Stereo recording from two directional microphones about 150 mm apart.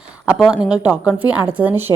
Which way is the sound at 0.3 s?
5° right (ahead or behind).